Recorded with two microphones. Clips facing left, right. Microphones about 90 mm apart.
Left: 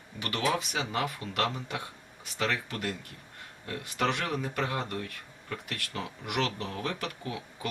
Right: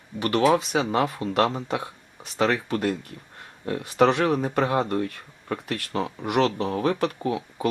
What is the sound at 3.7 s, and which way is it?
Speech, 35° right (ahead or behind).